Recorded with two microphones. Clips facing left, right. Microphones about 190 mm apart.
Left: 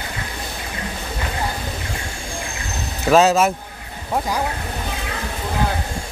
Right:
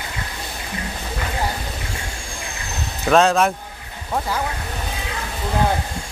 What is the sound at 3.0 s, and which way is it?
Speech, 5° left (ahead or behind).